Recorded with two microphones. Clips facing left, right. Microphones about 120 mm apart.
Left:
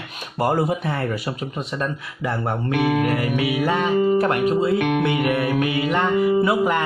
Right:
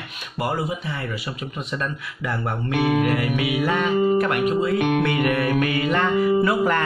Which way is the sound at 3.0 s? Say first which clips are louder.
Left 1 dB; 35° left (ahead or behind).